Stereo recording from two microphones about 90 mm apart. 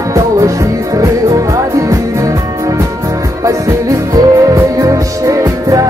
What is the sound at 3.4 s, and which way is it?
Music, 35° right (ahead or behind).